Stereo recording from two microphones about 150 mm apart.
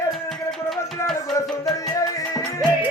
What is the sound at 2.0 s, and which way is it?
Music, 20° left (ahead or behind).